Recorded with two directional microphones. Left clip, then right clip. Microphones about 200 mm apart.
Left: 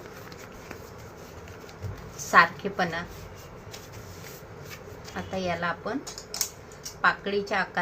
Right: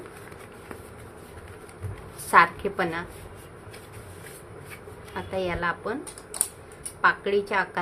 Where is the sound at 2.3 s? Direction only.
20° right (ahead or behind).